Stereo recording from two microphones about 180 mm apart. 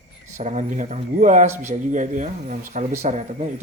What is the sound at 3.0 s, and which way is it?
Speech, 40° right (ahead or behind).